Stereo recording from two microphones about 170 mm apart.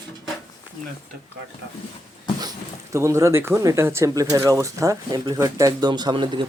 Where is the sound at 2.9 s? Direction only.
15° right (ahead or behind).